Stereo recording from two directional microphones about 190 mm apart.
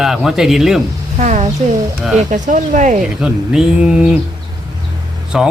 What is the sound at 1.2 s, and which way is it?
A woman's voice, 40° right (ahead or behind).